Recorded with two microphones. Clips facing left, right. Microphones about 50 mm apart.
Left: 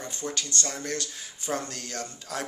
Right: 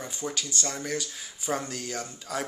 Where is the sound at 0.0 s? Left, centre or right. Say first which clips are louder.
Even; centre.